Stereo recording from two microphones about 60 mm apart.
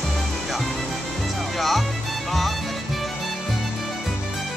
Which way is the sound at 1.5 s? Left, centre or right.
Centre.